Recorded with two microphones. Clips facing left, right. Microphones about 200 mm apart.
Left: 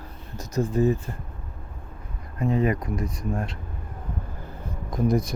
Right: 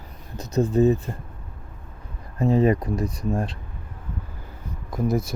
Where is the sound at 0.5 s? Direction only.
20° right (ahead or behind).